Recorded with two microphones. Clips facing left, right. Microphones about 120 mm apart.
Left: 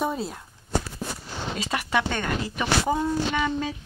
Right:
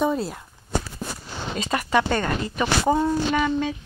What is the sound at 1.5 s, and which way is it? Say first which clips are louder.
Speech: right 4 dB; 5° left (ahead or behind).